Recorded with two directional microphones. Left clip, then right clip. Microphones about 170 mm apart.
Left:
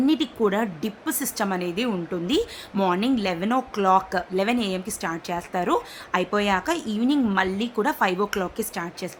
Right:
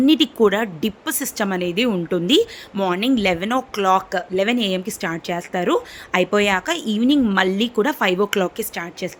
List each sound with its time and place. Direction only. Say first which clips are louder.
0.0 s speech: right 7 dB; 30° right (ahead or behind)
2.0 s speech: right 10 dB; 30° right (ahead or behind)
2.7 s speech: right 3 dB; 20° right (ahead or behind)